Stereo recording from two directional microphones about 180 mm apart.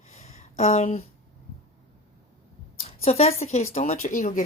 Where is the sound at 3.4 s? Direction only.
35° left (ahead or behind).